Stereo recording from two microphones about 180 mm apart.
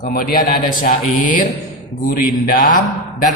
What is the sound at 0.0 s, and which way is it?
A man's voice, 50° left (ahead or behind).